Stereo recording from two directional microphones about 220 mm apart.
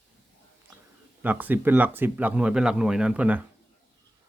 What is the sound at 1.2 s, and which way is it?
Speech, 10° right (ahead or behind).